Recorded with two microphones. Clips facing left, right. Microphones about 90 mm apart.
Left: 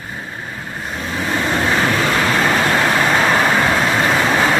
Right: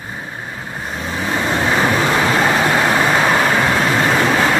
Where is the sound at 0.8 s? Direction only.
5° right (ahead or behind).